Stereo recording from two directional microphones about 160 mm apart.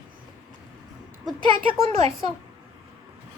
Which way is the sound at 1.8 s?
40° right (ahead or behind).